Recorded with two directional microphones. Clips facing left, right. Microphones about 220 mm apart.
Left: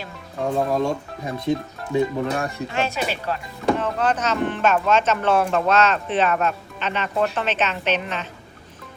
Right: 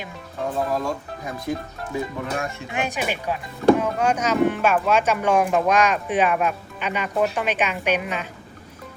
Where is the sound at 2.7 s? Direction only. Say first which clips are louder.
Right 1 dB; 15° right (ahead or behind).